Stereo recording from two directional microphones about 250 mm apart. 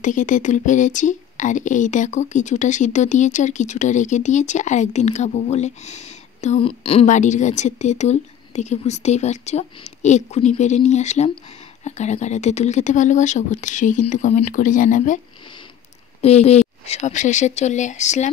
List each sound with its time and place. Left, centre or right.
0.0 s speech: left
16.2 s speech: left